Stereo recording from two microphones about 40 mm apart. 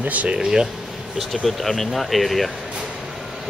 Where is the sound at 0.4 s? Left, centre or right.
Centre.